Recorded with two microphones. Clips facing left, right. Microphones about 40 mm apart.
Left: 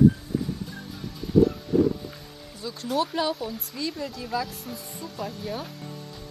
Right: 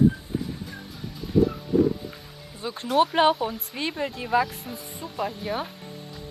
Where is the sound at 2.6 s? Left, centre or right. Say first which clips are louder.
Right 5 dB; right.